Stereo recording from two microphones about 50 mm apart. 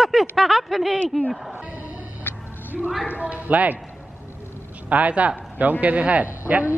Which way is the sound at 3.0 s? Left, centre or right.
Right.